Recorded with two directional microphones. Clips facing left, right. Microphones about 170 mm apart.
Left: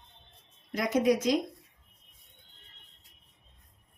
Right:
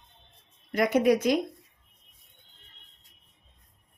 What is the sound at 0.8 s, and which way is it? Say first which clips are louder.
Speech: right 4 dB; 60° right (ahead or behind).